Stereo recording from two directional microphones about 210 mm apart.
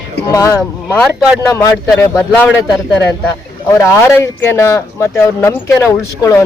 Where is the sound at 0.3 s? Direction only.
15° left (ahead or behind).